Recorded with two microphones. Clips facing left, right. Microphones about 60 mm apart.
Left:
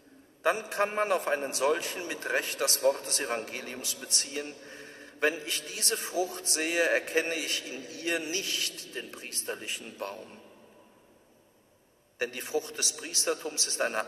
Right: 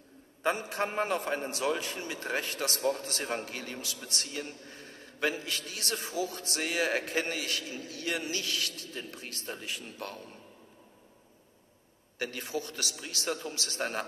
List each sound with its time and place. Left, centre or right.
0.4 s a man's voice: centre
12.2 s a man's voice: left